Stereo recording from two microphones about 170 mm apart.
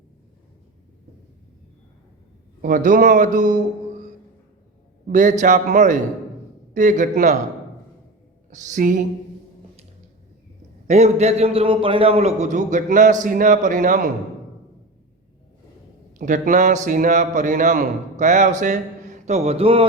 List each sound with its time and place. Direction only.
2.6 s a man's voice: 50° right (ahead or behind)
5.0 s a man's voice: 45° right (ahead or behind)
8.4 s a man's voice: 45° right (ahead or behind)
10.8 s a man's voice: 40° right (ahead or behind)
16.1 s a man's voice: 50° right (ahead or behind); by 19.8 s 35° right (ahead or behind)